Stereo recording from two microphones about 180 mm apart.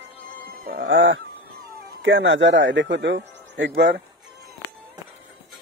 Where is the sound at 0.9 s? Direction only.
90° right.